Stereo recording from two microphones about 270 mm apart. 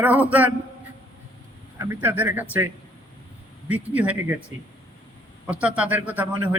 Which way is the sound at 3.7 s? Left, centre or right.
Centre.